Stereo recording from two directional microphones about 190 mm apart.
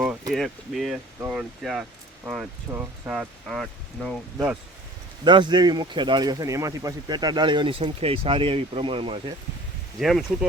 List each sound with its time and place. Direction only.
0.0 s speech: 5° right (ahead or behind)
5.2 s speech: 25° right (ahead or behind)
10.0 s speech: centre (ahead or behind)